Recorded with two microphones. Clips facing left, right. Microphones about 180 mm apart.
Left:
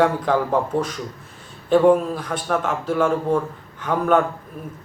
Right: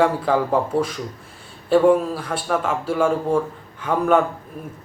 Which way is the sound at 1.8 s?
5° right (ahead or behind).